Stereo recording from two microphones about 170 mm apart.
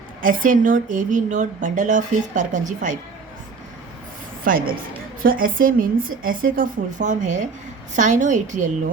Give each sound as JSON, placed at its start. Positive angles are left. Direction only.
{"t": 0.2, "sound": "speech", "side_deg": -50}
{"t": 4.4, "sound": "a woman's voice", "side_deg": -55}